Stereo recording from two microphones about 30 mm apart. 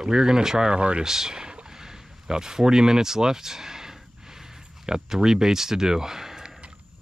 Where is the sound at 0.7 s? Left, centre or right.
Right.